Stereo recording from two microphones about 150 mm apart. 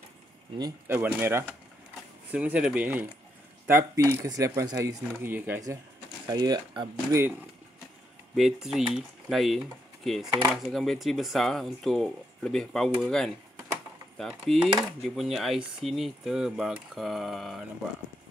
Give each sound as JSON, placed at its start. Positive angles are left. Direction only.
{"t": 0.8, "sound": "speech", "side_deg": -15}
{"t": 6.2, "sound": "speech", "side_deg": -25}
{"t": 8.4, "sound": "speech", "side_deg": 0}